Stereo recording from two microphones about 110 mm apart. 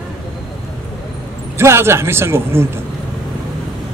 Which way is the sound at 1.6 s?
25° right (ahead or behind).